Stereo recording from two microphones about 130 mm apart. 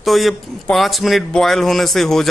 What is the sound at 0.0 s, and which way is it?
A man's voice, centre (ahead or behind).